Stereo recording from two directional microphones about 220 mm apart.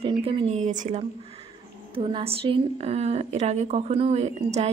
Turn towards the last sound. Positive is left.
turn(degrees=-30)  # may be behind; listen again after turning